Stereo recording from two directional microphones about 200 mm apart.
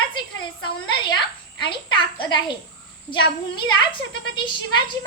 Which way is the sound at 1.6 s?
25° left (ahead or behind).